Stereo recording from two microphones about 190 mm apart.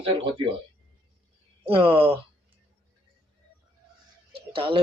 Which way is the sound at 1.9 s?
10° right (ahead or behind).